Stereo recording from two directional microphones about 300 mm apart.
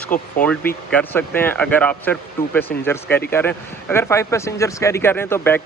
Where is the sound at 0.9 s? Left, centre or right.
Centre.